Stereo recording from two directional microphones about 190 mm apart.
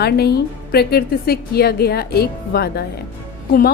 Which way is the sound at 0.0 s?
55° left (ahead or behind).